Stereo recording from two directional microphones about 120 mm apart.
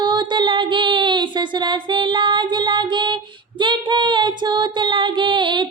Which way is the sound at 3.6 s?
40° right (ahead or behind).